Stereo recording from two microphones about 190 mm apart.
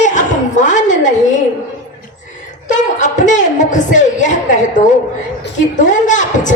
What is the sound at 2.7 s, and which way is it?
A woman's voice, 40° left (ahead or behind).